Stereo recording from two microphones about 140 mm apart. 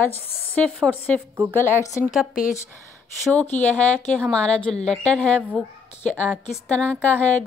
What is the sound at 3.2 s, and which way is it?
A woman's voice, 10° left (ahead or behind).